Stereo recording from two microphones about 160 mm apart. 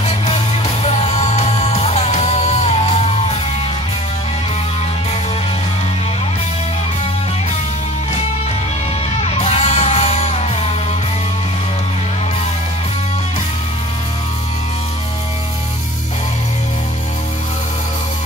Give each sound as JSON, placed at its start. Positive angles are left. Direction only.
{"t": 0.0, "sound": "music", "side_deg": 45}
{"t": 9.2, "sound": "music", "side_deg": 45}